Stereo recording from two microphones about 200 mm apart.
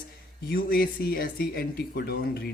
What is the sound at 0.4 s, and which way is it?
Speech, 50° left (ahead or behind).